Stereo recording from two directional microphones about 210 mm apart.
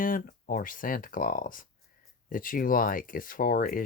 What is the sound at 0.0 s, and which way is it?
Speech, 40° left (ahead or behind).